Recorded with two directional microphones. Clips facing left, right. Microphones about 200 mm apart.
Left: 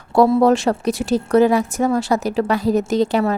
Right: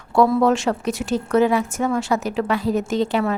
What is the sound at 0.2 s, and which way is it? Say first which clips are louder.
A woman's voice: left 3 dB; 35° left (ahead or behind).